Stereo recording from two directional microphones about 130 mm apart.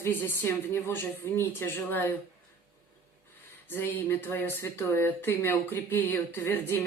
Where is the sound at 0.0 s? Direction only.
15° left (ahead or behind).